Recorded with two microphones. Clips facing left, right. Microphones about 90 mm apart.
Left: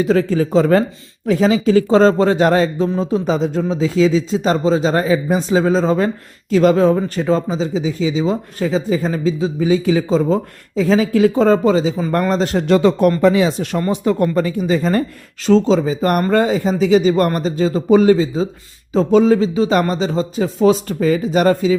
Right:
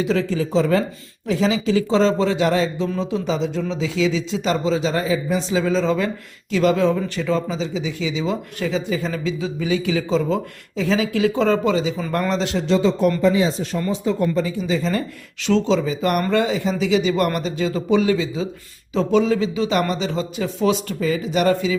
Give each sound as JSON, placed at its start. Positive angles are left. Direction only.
{"t": 0.0, "sound": "speech", "side_deg": 45}